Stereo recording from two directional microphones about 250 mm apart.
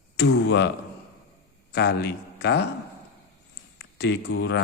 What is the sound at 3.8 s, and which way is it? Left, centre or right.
Speech, left.